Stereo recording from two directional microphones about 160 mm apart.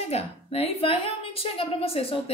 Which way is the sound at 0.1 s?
40° left (ahead or behind).